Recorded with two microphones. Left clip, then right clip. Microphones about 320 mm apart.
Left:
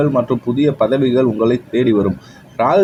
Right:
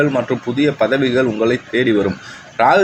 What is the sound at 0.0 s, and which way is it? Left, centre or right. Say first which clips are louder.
A man's voice: left 1 dB; left.